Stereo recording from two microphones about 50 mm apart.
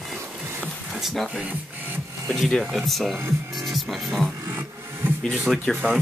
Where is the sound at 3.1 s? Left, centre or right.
Right.